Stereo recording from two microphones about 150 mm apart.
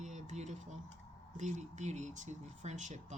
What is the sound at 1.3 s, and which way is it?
Speech, 50° right (ahead or behind).